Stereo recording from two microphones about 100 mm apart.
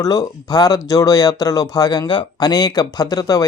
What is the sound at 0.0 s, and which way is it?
Speech, 40° left (ahead or behind).